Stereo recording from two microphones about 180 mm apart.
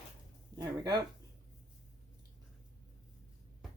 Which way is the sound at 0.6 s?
20° right (ahead or behind).